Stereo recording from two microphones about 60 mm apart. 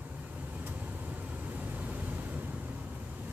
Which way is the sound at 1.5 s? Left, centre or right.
Right.